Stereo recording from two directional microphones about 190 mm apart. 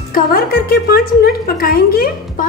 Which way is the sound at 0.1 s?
50° left (ahead or behind).